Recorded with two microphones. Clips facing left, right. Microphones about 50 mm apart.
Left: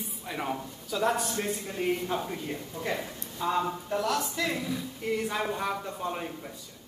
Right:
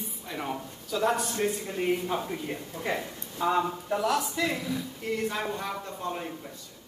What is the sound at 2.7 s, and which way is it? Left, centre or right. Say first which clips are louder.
Speech: right 1 dB; centre.